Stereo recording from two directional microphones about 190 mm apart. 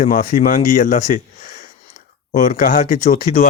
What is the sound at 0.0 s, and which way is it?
Speech, 45° left (ahead or behind).